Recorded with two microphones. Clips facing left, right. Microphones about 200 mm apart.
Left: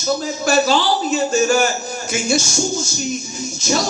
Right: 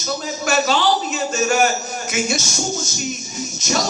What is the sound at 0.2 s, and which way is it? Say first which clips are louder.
Speech: left 3 dB; 30° left (ahead or behind).